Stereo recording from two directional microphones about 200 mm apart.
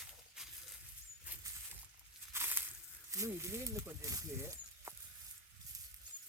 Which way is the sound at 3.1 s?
15° right (ahead or behind).